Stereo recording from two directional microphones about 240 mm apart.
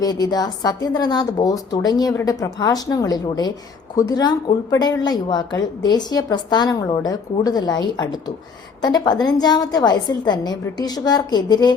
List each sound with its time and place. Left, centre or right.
0.0 s a woman's voice: centre